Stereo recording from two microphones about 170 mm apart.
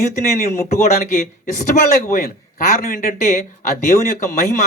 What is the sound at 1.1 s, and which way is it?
Speech, 45° left (ahead or behind).